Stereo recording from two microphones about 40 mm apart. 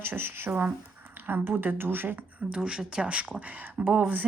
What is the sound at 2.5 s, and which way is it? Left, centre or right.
Speech, right.